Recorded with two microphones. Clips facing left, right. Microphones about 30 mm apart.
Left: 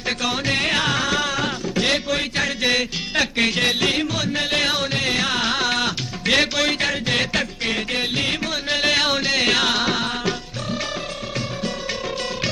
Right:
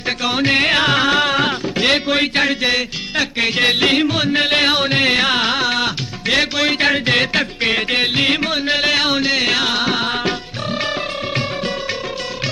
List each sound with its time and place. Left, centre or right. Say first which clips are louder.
0.2 s music: right 8 dB; right
2.6 s music: right 2 dB; centre
3.5 s music: right 5 dB; right
5.5 s music: right 3 dB; centre
6.7 s music: right 6 dB; right; by 9.9 s centre
9.9 s music: right 4 dB; right